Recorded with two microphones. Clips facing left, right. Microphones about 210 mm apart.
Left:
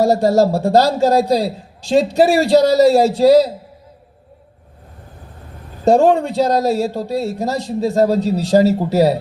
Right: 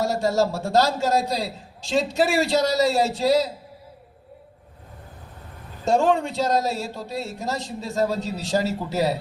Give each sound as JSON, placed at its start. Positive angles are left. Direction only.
{"t": 0.0, "sound": "a man's voice", "side_deg": 40}
{"t": 5.8, "sound": "a man's voice", "side_deg": 40}